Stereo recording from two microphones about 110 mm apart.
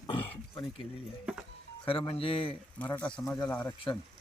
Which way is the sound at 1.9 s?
55° left (ahead or behind).